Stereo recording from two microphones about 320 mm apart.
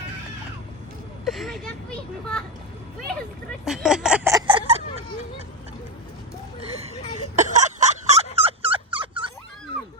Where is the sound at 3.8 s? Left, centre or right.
Centre.